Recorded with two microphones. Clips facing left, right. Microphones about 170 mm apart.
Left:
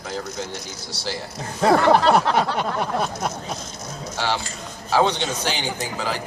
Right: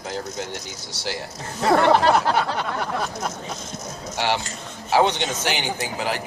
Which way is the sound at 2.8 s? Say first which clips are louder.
Left 2 dB; 20° left (ahead or behind).